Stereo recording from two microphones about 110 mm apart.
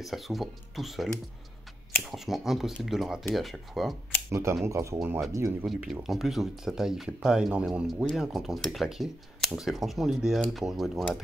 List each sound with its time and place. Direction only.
0.0 s speech: centre (ahead or behind)
4.3 s speech: 25° right (ahead or behind)
5.7 s speech: centre (ahead or behind)